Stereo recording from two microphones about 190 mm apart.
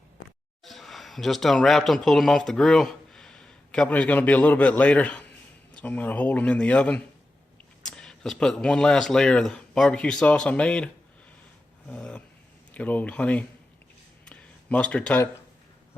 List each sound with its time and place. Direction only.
0.6 s speech: centre (ahead or behind)
11.9 s speech: 5° left (ahead or behind)
14.3 s a sound: 5° left (ahead or behind)